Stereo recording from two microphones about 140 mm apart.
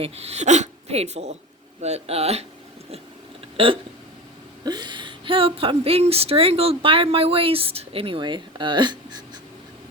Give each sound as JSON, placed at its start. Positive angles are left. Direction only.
{"t": 0.0, "sound": "speech", "side_deg": -50}
{"t": 3.6, "sound": "speech", "side_deg": -45}
{"t": 4.6, "sound": "speech", "side_deg": -30}